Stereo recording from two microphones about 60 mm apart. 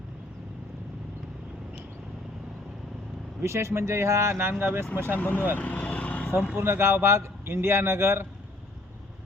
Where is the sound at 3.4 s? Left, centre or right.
Right.